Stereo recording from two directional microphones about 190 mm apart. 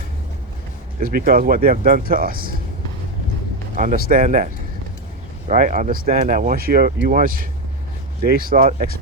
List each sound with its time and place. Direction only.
0.9 s speech: 50° right (ahead or behind)
3.8 s speech: 45° right (ahead or behind)
5.5 s speech: 40° right (ahead or behind)